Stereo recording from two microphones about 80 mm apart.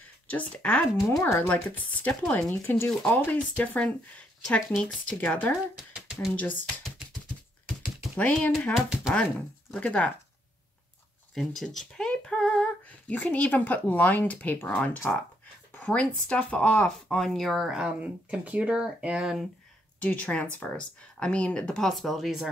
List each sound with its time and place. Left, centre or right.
0.3 s speech: centre
1.2 s speech: left
1.5 s speech: centre
2.9 s speech: centre
3.3 s speech: centre
5.8 s speech: centre
6.3 s speech: centre
8.2 s speech: centre
8.7 s speech: centre
9.1 s speech: centre
11.3 s speech: centre
13.1 s speech: centre
15.8 s speech: centre
20.0 s speech: centre